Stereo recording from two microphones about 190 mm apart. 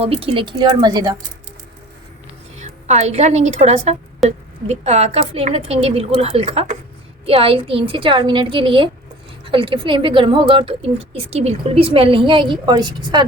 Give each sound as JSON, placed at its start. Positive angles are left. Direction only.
{"t": 0.0, "sound": "a woman's voice", "side_deg": -30}
{"t": 2.6, "sound": "a woman's voice", "side_deg": -35}